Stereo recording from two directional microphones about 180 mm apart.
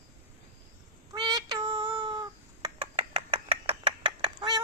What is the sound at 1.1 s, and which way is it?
Cat, 20° right (ahead or behind).